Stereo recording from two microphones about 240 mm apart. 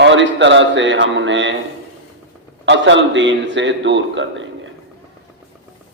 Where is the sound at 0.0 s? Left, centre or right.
Right.